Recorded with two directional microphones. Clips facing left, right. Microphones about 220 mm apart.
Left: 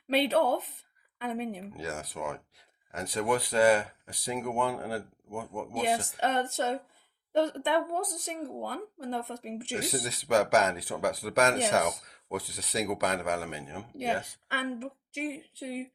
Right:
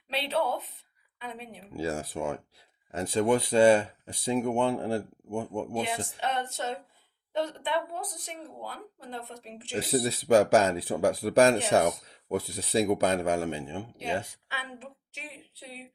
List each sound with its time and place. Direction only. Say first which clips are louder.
0.1 s speech: left 4 dB; 50° left (ahead or behind)
1.7 s speech: right 6 dB; 30° right (ahead or behind)
6.1 s speech: left 3 dB; 45° left (ahead or behind)
9.7 s speech: right 6 dB; 30° right (ahead or behind)
14.4 s speech: left 8 dB; 50° left (ahead or behind)